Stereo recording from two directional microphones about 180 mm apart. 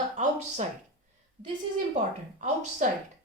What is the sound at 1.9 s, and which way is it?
Speech, 40° right (ahead or behind).